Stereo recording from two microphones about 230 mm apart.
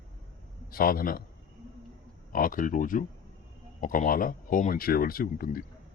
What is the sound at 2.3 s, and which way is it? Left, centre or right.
Speech, left.